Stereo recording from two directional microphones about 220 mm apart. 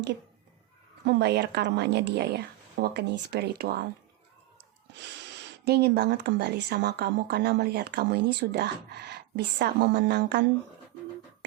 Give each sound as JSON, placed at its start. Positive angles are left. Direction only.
{"t": 1.0, "sound": "speech", "side_deg": -50}
{"t": 5.3, "sound": "speech", "side_deg": -50}